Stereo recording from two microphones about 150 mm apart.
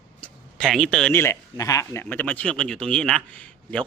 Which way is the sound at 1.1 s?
15° left (ahead or behind).